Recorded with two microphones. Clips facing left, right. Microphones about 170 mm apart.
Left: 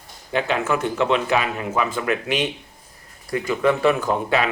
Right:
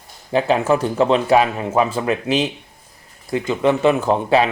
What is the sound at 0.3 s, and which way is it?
Speech, 35° right (ahead or behind).